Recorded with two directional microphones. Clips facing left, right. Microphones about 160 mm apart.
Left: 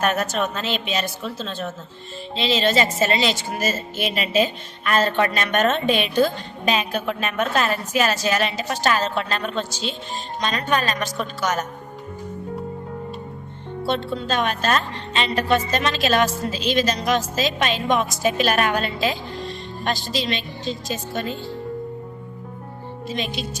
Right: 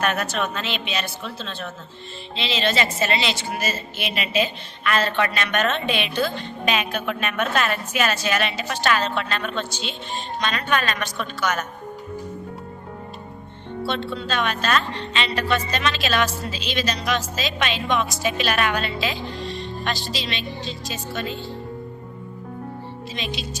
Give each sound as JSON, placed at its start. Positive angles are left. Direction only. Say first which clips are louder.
{"t": 0.0, "sound": "a woman's voice", "louder": "left 2 dB", "side_deg": 40}
{"t": 13.8, "sound": "a woman's voice", "louder": "left 3 dB", "side_deg": 45}
{"t": 23.0, "sound": "a woman's voice", "louder": "left 4 dB", "side_deg": 50}